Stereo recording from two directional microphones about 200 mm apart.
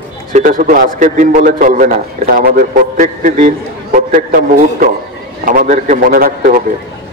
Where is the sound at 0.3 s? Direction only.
40° right (ahead or behind).